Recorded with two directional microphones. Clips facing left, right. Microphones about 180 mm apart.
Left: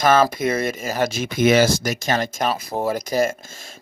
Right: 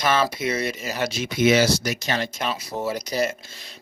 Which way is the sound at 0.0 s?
45° left (ahead or behind).